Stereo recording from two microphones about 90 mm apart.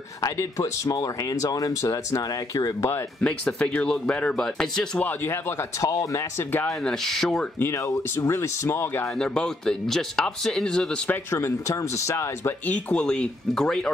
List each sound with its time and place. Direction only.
0.2 s speech: 40° left (ahead or behind)
3.2 s speech: 10° left (ahead or behind)
5.0 s speech: 25° left (ahead or behind)
5.8 s speech: 40° left (ahead or behind)
6.8 s speech: 5° left (ahead or behind)
7.5 s speech: 30° left (ahead or behind)
9.2 s speech: 10° left (ahead or behind)
11.3 s speech: 35° left (ahead or behind)
12.6 s speech: 15° left (ahead or behind)